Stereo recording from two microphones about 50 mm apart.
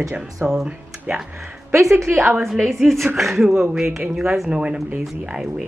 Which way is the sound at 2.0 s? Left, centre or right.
Right.